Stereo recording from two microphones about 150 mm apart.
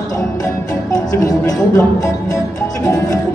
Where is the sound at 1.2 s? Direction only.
20° left (ahead or behind).